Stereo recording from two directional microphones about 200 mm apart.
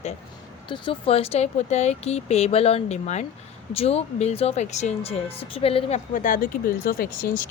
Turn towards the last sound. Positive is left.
turn(degrees=45)  # may be behind; listen again after turning